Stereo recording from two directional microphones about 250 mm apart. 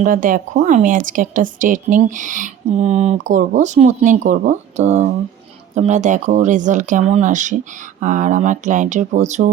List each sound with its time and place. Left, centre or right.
0.0 s a woman's voice: right